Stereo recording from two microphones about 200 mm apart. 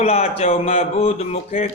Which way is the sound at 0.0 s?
30° left (ahead or behind).